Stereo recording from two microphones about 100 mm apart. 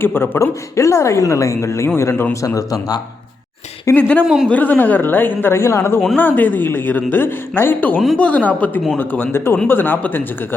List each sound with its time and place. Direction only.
0.0 s a woman's voice: 20° left (ahead or behind)
3.9 s a woman's voice: 15° left (ahead or behind)